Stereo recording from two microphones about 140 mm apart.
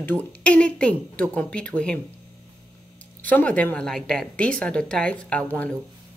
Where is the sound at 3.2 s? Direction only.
10° left (ahead or behind).